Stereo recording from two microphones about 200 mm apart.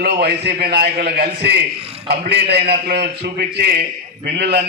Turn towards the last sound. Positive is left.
turn(degrees=-55)  # may be behind; listen again after turning